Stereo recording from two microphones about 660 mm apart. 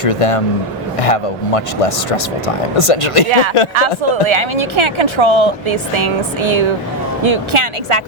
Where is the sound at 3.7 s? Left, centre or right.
Right.